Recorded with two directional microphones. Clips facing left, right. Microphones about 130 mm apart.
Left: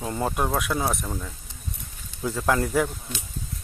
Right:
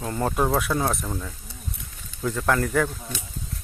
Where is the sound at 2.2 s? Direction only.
15° left (ahead or behind).